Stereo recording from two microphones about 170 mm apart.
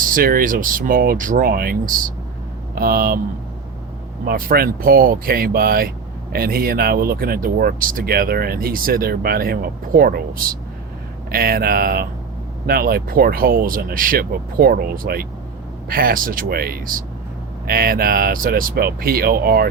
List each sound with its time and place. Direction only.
0.0 s speech: 55° right (ahead or behind)
4.3 s speech: 60° right (ahead or behind)